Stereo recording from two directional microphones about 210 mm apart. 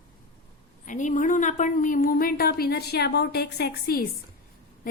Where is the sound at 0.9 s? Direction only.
35° left (ahead or behind).